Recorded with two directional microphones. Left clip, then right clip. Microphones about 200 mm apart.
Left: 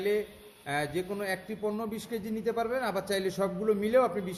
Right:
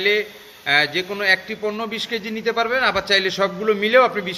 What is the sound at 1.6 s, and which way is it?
Speech, 15° right (ahead or behind).